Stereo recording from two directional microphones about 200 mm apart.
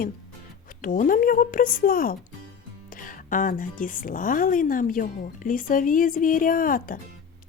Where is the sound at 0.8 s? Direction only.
40° left (ahead or behind).